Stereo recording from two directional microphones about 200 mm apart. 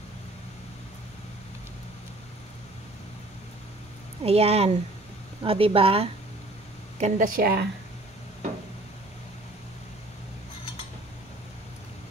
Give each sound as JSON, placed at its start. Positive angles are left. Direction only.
{"t": 4.2, "sound": "speech", "side_deg": -30}
{"t": 7.0, "sound": "a woman's voice", "side_deg": -40}